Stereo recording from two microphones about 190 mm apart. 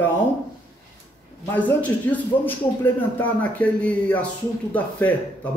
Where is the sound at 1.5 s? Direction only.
10° left (ahead or behind).